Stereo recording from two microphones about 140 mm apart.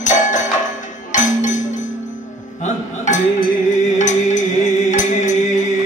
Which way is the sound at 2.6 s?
60° left (ahead or behind).